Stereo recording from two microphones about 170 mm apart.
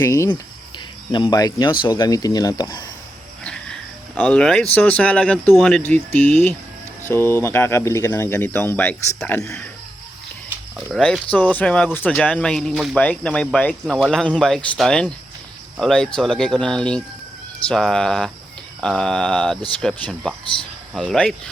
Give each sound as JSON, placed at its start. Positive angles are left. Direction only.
{"t": 0.0, "sound": "speech", "side_deg": 20}
{"t": 3.4, "sound": "speech", "side_deg": 5}
{"t": 10.9, "sound": "speech", "side_deg": 5}